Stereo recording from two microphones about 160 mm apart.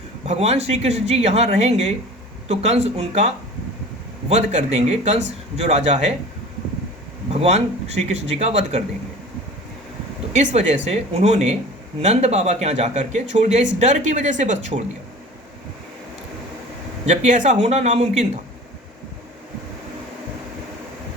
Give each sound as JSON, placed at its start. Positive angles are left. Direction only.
{"t": 0.3, "sound": "speech", "side_deg": -45}
{"t": 7.3, "sound": "speech", "side_deg": -45}
{"t": 10.3, "sound": "speech", "side_deg": -45}
{"t": 17.1, "sound": "speech", "side_deg": -50}